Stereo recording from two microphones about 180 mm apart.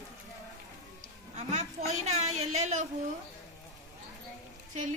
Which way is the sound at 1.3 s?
40° right (ahead or behind).